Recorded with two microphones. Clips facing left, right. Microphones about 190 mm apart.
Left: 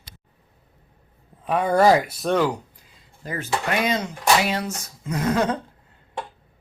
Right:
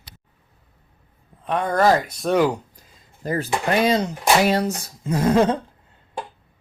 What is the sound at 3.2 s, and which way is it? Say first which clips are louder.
Speech: right 4 dB; 40° right (ahead or behind).